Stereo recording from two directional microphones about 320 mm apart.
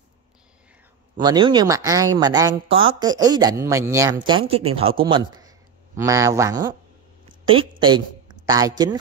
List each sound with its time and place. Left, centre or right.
1.1 s speech: centre
7.2 s a sound: centre
8.5 s speech: centre